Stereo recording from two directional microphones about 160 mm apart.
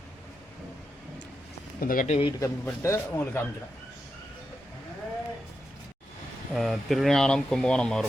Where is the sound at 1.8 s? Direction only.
60° left (ahead or behind).